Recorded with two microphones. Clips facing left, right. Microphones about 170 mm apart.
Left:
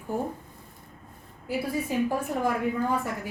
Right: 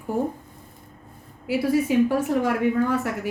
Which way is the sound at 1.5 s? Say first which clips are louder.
Right 8 dB; 90° right.